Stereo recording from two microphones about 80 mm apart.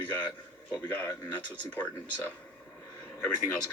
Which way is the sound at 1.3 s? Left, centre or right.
Left.